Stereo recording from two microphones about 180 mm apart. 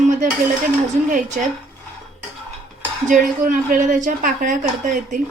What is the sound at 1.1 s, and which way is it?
Speech, 50° right (ahead or behind).